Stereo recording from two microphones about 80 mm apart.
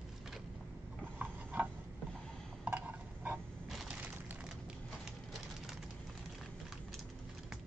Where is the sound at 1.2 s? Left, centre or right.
Right.